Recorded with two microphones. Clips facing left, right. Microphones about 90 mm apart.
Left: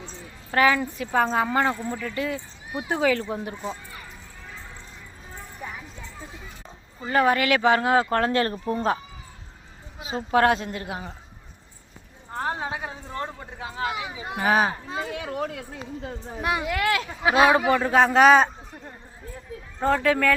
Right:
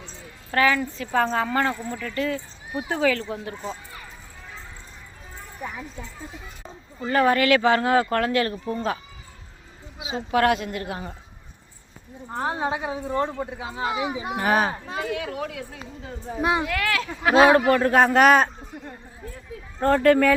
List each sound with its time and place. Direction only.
0.5 s speech: 20° left (ahead or behind)
3.5 s a man's voice: centre (ahead or behind)
7.0 s speech: 15° left (ahead or behind); by 9.0 s 35° left (ahead or behind)
10.0 s a woman's voice: 45° left (ahead or behind)
10.3 s speech: 30° left (ahead or behind)
12.3 s a woman's voice: 10° right (ahead or behind)
14.3 s a man's voice: centre (ahead or behind)
15.2 s speech: 35° left (ahead or behind)
16.4 s speech: 25° right (ahead or behind)
16.6 s speech: 25° left (ahead or behind)
17.6 s a man's voice: centre (ahead or behind)
19.8 s a man's voice: centre (ahead or behind)